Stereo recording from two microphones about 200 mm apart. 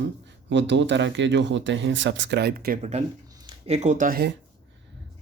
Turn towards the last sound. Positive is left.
turn(degrees=-45)  # may be behind; listen again after turning